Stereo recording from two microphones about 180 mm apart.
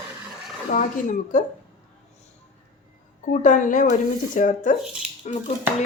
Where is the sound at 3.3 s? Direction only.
45° left (ahead or behind).